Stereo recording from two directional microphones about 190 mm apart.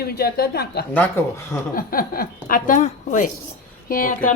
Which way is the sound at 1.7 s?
50° left (ahead or behind).